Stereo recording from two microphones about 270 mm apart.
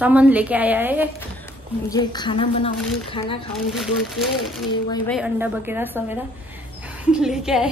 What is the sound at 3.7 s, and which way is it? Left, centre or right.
A woman's voice, centre.